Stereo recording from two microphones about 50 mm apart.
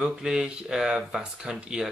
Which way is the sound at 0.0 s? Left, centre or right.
Centre.